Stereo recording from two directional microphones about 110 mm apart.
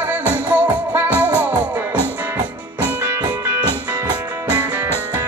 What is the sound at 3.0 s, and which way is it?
Music, 20° right (ahead or behind).